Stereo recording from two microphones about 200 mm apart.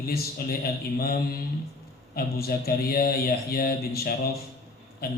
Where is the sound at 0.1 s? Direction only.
50° left (ahead or behind).